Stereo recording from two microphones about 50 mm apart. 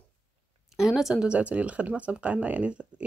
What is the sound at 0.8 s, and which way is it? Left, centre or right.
Speech, centre.